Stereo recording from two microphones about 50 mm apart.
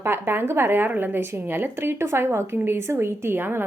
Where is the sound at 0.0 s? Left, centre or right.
Right.